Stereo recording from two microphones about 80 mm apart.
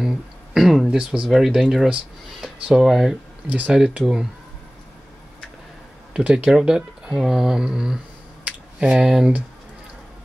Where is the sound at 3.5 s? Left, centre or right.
Centre.